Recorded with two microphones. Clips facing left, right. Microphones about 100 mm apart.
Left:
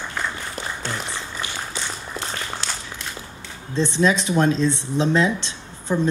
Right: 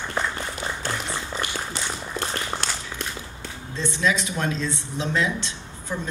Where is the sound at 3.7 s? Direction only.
25° left (ahead or behind).